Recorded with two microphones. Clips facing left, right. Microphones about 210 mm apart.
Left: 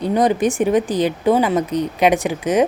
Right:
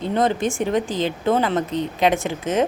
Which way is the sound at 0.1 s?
15° left (ahead or behind).